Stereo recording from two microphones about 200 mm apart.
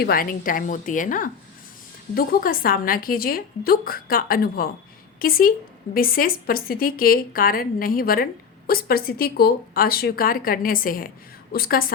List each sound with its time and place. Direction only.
0.0 s a woman's voice: 45° left (ahead or behind)